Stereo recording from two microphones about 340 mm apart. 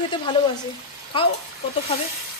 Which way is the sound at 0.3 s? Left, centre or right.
Centre.